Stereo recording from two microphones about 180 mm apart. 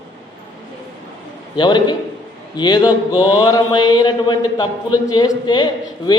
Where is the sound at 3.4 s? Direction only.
20° left (ahead or behind).